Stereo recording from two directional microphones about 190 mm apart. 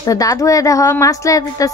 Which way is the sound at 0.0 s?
20° left (ahead or behind).